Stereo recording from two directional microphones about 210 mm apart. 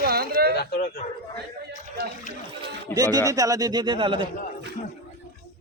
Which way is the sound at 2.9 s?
15° right (ahead or behind).